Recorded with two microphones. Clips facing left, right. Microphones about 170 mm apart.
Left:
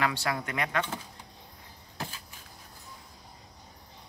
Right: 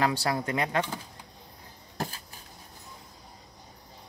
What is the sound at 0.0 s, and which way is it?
Speech, 35° right (ahead or behind).